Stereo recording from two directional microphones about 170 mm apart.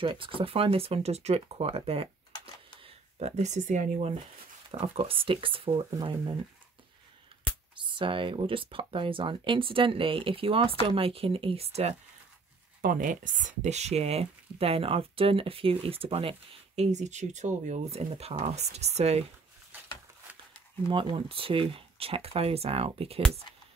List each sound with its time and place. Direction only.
0.0 s speech: 30° right (ahead or behind); by 4.1 s 45° right (ahead or behind)
4.6 s speech: 35° right (ahead or behind)
7.7 s speech: 30° right (ahead or behind)
12.8 s speech: 50° right (ahead or behind)
20.9 s speech: 30° right (ahead or behind)